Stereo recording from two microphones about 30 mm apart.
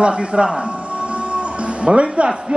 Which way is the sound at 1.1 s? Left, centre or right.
Right.